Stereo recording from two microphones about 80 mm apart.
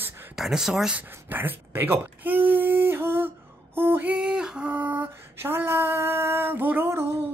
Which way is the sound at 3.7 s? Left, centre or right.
Right.